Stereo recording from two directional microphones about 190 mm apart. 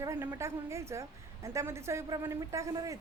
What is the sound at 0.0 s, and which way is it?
A woman's voice, 15° right (ahead or behind).